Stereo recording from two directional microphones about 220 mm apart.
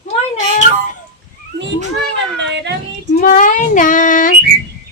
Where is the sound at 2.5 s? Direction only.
50° right (ahead or behind).